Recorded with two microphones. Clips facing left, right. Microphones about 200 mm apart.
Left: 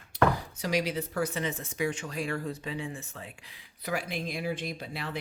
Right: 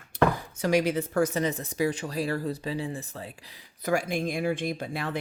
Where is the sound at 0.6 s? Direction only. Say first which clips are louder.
Right 6 dB; 50° right (ahead or behind).